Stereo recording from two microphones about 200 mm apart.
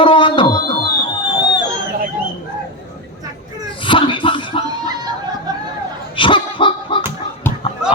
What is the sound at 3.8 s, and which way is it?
Music, 25° left (ahead or behind).